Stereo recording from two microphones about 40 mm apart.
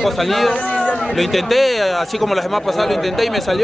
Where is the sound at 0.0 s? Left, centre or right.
Centre.